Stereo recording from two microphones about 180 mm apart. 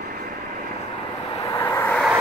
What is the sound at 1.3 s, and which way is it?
Vehicle, 25° left (ahead or behind).